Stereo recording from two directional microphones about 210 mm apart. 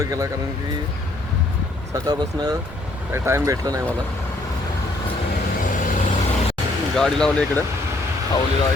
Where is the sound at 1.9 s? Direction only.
15° right (ahead or behind).